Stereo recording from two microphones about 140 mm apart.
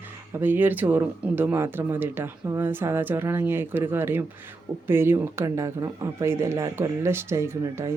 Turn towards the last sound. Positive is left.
turn(degrees=-20)  # may be behind; listen again after turning